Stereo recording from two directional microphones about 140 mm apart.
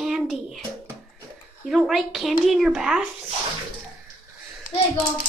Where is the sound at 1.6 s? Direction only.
Centre (ahead or behind).